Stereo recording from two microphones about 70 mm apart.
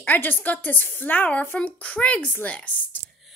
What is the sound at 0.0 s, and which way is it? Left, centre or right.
A woman's voice, left.